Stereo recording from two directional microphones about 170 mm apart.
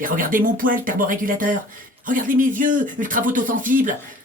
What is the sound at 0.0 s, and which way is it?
Speech, 55° right (ahead or behind).